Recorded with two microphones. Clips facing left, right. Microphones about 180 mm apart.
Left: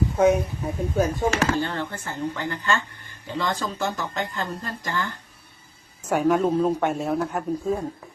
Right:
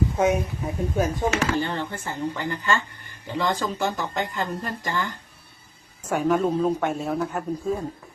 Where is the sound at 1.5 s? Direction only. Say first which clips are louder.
Even; 15° right (ahead or behind).